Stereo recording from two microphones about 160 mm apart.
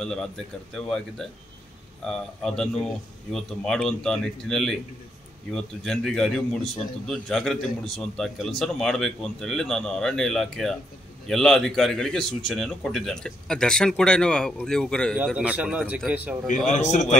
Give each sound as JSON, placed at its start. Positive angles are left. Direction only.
{"t": 0.0, "sound": "a man's voice", "side_deg": 5}
{"t": 15.2, "sound": "a man's voice", "side_deg": -5}
{"t": 16.8, "sound": "a man's voice", "side_deg": 50}